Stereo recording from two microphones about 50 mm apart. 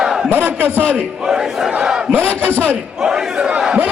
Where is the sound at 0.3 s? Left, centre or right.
Right.